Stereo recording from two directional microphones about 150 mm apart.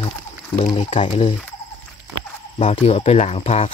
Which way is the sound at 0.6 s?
50° left (ahead or behind).